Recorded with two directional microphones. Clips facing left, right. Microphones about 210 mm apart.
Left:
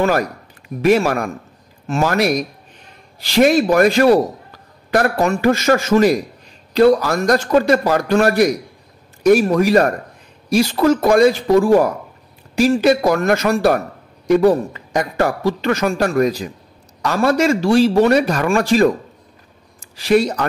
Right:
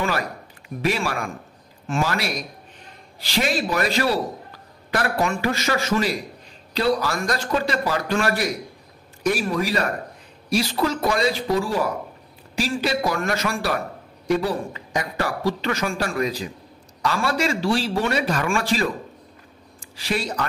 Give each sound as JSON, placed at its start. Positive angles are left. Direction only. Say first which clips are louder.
{"t": 0.8, "sound": "a man's voice", "louder": "left 10 dB", "side_deg": 45}